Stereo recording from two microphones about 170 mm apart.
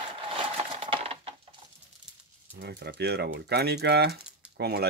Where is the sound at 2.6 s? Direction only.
75° right (ahead or behind).